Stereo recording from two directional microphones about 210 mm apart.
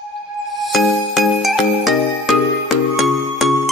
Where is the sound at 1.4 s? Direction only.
Centre (ahead or behind).